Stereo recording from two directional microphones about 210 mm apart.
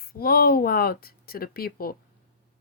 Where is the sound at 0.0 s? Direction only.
45° left (ahead or behind).